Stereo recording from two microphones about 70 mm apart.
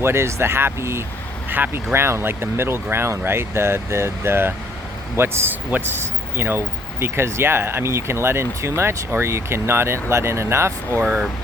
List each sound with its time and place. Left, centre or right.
0.0 s speech: right
1.5 s speech: right